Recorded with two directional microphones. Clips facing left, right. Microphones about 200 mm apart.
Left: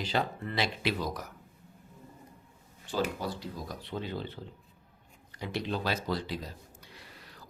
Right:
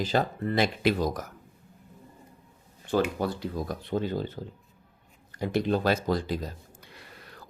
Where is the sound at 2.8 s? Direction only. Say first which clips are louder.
Right 6 dB; 55° right (ahead or behind).